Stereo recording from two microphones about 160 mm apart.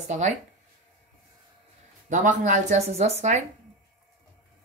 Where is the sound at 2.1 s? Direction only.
50° right (ahead or behind).